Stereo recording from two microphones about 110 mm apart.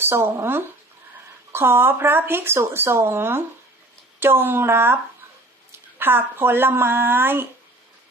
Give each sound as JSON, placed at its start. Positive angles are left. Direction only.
{"t": 0.0, "sound": "speech", "side_deg": -25}
{"t": 6.0, "sound": "speech", "side_deg": -20}